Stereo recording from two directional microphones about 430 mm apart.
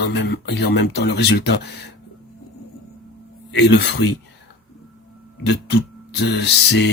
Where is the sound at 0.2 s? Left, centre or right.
Left.